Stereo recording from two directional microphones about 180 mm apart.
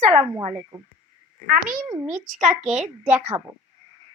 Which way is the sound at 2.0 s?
45° right (ahead or behind).